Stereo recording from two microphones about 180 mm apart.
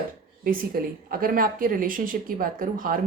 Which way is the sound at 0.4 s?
55° right (ahead or behind).